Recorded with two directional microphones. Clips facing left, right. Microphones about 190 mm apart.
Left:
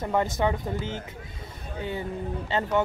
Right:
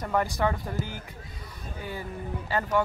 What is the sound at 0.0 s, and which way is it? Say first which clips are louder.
Speech: left 2 dB; 20° left (ahead or behind).